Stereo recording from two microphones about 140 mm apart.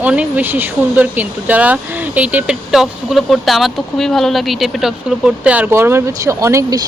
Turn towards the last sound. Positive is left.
turn(degrees=-20)  # may be behind; listen again after turning